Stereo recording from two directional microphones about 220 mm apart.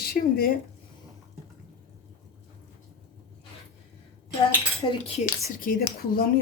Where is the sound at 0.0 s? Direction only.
45° left (ahead or behind).